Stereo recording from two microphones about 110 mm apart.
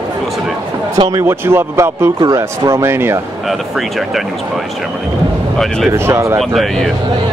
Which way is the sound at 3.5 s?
Centre (ahead or behind).